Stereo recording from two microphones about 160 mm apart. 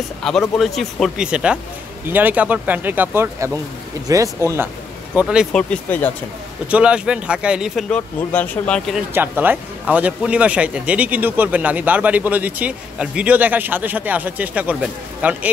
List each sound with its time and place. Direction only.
0.2 s speech: centre (ahead or behind); by 4.6 s 20° right (ahead or behind)
5.1 s speech: 5° right (ahead or behind)
6.7 s speech: 5° right (ahead or behind)
7.9 s speech: 10° left (ahead or behind)
9.1 s speech: 10° right (ahead or behind)